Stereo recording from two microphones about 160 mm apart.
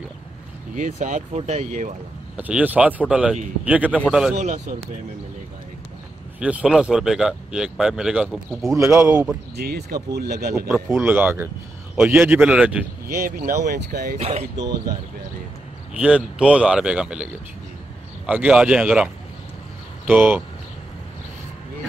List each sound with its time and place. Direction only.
0.7 s speech: 50° right (ahead or behind)
2.3 s speech: 10° right (ahead or behind)
4.4 s speech: 45° right (ahead or behind)
6.4 s speech: 5° right (ahead or behind)
8.6 s speech: 20° right (ahead or behind)
9.1 s speech: 10° right (ahead or behind)
9.6 s speech: 80° right
10.9 s speech: 15° right (ahead or behind)
13.1 s speech: 65° right (ahead or behind)
14.1 s speech: 40° right (ahead or behind)
16.0 s speech: 5° right (ahead or behind)
20.1 s speech: 10° right (ahead or behind)